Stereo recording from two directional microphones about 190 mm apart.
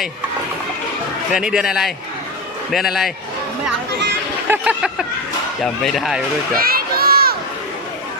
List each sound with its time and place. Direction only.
1.3 s a man's voice: 5° right (ahead or behind)
4.4 s a man's voice: 10° right (ahead or behind)
6.6 s crowd: 50° right (ahead or behind)